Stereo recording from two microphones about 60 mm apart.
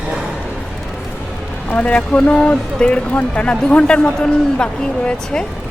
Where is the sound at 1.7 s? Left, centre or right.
Left.